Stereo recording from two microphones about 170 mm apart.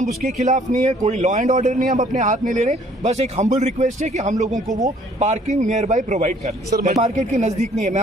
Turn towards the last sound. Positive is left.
turn(degrees=-45)  # may be behind; listen again after turning